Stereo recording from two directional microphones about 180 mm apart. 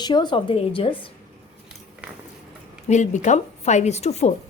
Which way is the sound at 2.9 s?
40° left (ahead or behind).